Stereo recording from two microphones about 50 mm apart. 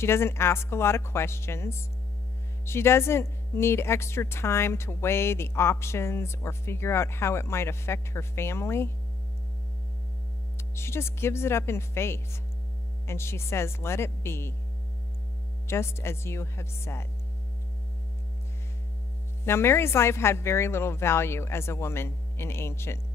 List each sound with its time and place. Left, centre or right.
0.0 s speech: left
10.8 s speech: left
15.6 s speech: left
19.4 s speech: left